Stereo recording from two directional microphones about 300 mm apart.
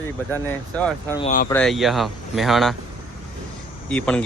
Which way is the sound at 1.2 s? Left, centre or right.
Left.